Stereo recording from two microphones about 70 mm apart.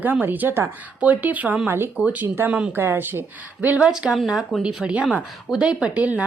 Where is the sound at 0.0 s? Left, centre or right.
Right.